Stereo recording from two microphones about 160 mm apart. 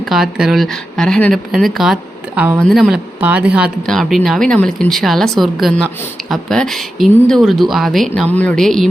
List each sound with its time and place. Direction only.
0.0 s speech: 5° right (ahead or behind)
2.6 s speech: 5° left (ahead or behind)
3.8 s speech: centre (ahead or behind)